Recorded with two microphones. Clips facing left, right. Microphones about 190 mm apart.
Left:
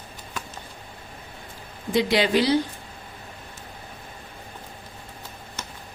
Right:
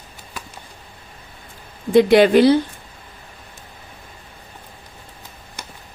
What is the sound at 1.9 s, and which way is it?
Speech, 55° right (ahead or behind).